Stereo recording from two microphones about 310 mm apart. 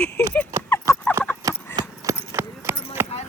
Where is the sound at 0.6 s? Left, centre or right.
Centre.